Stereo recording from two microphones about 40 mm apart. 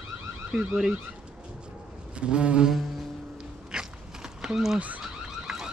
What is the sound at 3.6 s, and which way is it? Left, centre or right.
Dog, centre.